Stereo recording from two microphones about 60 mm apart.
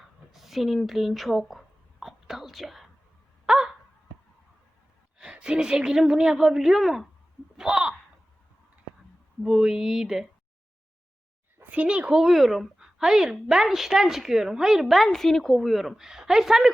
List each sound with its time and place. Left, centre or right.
0.3 s a sound: centre
5.1 s speech: centre
7.5 s a sound: centre
9.4 s speech: centre
11.7 s speech: right
12.2 s a woman's voice: centre